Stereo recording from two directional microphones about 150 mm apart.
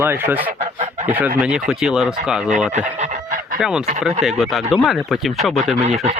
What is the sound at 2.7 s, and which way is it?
Chicken, 55° right (ahead or behind).